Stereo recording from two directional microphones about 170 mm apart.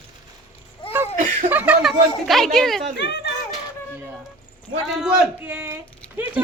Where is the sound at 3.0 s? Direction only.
90° left.